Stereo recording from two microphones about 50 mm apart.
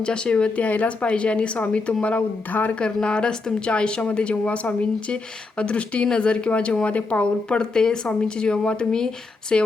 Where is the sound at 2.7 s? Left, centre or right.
Centre.